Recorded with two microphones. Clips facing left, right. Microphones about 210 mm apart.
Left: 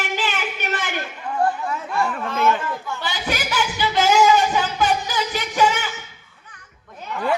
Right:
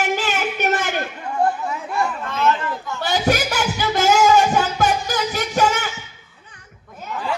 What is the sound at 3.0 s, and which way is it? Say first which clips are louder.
Music: right 10 dB; 45° right (ahead or behind).